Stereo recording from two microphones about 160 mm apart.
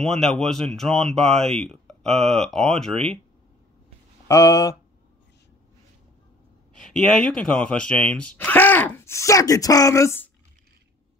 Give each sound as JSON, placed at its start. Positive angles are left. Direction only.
{"t": 0.0, "sound": "speech", "side_deg": 5}
{"t": 4.3, "sound": "speech", "side_deg": 20}
{"t": 6.7, "sound": "speech", "side_deg": 5}